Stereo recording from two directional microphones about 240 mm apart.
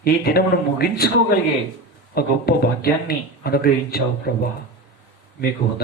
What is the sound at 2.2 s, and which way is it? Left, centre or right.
Speech, left.